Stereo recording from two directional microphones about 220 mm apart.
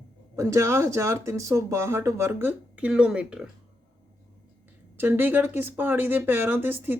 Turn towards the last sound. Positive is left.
turn(degrees=-10)  # may be behind; listen again after turning